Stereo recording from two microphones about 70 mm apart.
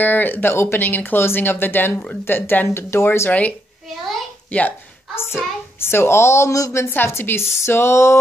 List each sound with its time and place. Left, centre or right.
0.0 s a woman's voice: left
3.3 s speech: left
5.8 s a woman's voice: left